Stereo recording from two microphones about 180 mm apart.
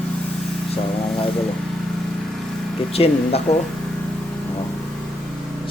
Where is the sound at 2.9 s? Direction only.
35° left (ahead or behind).